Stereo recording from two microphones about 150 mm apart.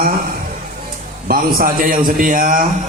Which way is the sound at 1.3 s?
75° right (ahead or behind).